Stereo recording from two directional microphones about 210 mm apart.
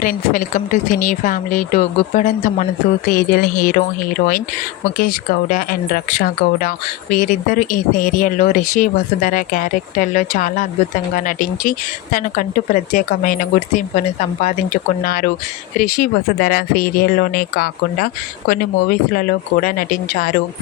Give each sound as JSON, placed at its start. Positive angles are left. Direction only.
{"t": 0.0, "sound": "speech", "side_deg": 40}
{"t": 4.9, "sound": "speech", "side_deg": 40}